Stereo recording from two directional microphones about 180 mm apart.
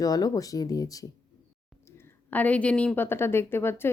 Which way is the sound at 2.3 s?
10° left (ahead or behind).